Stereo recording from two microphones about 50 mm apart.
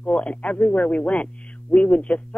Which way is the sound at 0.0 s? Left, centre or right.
Left.